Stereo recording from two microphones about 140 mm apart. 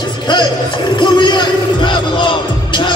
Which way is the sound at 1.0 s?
35° left (ahead or behind).